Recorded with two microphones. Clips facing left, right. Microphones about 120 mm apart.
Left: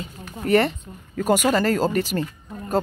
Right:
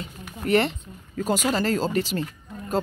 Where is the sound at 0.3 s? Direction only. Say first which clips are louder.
Left 3 dB; 45° left (ahead or behind).